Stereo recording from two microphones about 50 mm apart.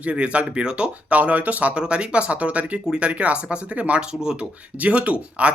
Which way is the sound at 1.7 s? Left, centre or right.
Right.